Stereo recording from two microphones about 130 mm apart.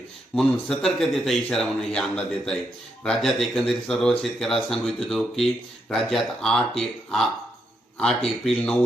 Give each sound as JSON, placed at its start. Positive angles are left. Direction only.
{"t": 0.3, "sound": "a man's voice", "side_deg": 5}